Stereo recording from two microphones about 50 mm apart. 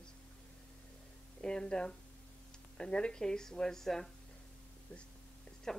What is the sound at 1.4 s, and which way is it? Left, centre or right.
A woman's voice, centre.